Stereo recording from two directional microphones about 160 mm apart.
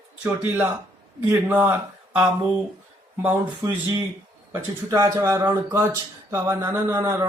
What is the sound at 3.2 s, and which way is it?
A man's voice, 15° right (ahead or behind).